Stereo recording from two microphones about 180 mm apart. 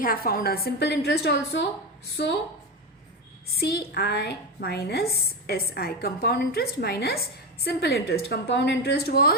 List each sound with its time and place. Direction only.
0.0 s a woman's voice: 55° left (ahead or behind)
3.6 s a woman's voice: 60° left (ahead or behind)